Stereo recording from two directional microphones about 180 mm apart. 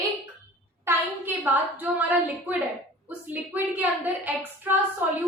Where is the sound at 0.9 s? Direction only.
10° right (ahead or behind).